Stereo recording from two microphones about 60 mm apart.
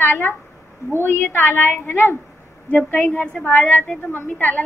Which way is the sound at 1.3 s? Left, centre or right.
Left.